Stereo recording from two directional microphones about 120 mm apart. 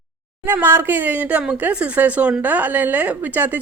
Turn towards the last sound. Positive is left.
turn(degrees=-15)  # may be behind; listen again after turning